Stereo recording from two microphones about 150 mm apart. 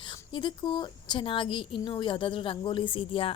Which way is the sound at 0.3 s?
30° left (ahead or behind).